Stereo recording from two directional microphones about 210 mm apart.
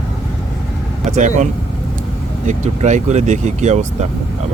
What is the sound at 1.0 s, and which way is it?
Speech, 35° right (ahead or behind).